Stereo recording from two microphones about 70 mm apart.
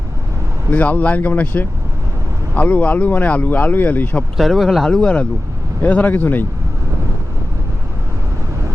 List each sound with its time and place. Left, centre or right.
0.7 s speech: left
4.4 s speech: centre
4.9 s speech: centre